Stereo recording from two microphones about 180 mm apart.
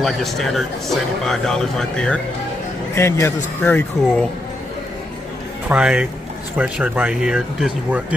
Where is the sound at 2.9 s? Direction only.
15° left (ahead or behind).